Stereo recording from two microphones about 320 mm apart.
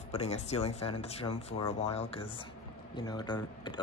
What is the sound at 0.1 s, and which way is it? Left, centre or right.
Speech, centre.